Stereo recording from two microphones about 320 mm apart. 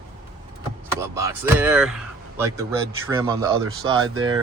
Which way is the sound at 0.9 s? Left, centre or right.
Centre.